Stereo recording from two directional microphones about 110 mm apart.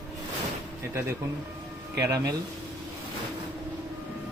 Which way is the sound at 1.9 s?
30° right (ahead or behind).